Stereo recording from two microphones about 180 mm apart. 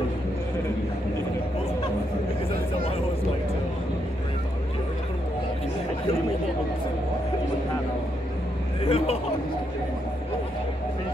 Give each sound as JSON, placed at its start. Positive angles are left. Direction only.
{"t": 8.8, "sound": "speech", "side_deg": 35}